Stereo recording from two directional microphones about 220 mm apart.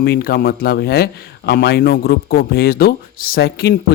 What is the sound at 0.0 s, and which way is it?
Speech, 45° left (ahead or behind).